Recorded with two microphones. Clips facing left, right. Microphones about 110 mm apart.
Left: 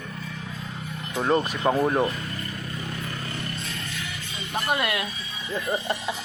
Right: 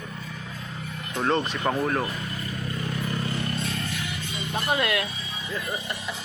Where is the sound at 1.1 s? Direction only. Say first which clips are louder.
Left 2 dB; 5° left (ahead or behind).